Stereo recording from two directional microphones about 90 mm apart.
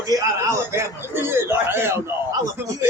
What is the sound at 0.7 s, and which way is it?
A man's voice, 25° right (ahead or behind).